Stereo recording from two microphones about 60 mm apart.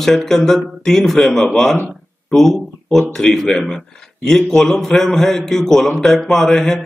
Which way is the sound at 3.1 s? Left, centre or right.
Centre.